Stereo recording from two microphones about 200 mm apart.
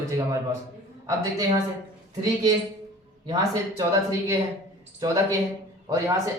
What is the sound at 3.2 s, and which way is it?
Speech, 20° right (ahead or behind).